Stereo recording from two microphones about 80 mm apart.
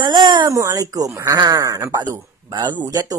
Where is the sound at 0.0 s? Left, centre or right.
Right.